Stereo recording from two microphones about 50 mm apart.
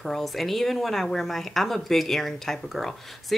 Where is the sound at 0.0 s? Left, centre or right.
Centre.